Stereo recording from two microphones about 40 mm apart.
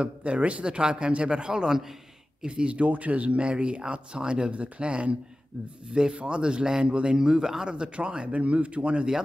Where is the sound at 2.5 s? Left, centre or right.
Right.